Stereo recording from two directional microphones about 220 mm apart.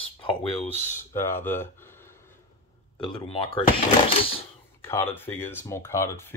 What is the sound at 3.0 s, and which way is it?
Speech, 25° left (ahead or behind).